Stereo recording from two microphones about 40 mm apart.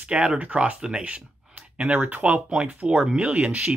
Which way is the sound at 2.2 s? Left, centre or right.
Right.